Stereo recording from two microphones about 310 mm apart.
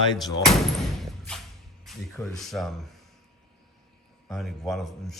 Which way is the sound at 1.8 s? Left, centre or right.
Centre.